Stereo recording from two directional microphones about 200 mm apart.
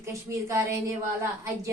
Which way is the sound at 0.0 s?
15° right (ahead or behind).